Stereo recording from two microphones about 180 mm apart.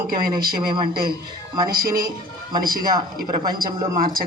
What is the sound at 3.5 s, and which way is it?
Speech, 20° right (ahead or behind).